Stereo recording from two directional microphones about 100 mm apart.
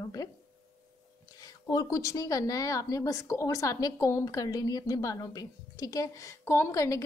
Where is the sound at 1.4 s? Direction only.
35° left (ahead or behind).